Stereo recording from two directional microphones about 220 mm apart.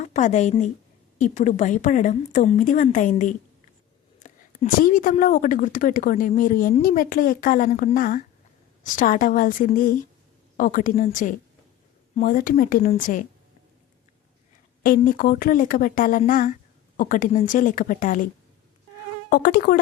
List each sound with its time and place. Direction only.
0.0 s a woman's voice: 35° left (ahead or behind)
14.8 s a woman's voice: 40° left (ahead or behind)
19.3 s insect: 45° left (ahead or behind)